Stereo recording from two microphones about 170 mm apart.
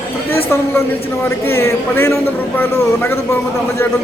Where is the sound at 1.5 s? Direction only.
15° left (ahead or behind).